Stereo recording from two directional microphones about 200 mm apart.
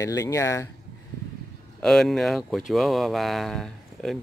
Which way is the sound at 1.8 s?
Centre (ahead or behind).